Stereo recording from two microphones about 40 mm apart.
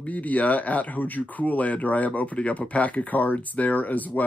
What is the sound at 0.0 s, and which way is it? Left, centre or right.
Speech, left.